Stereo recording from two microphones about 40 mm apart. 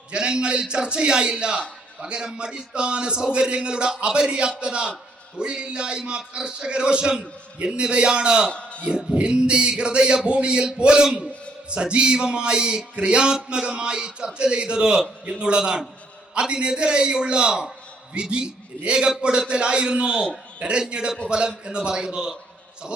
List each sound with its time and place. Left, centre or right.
0.1 s a man's voice: right
8.4 s a sound: left
9.1 s a man's voice: right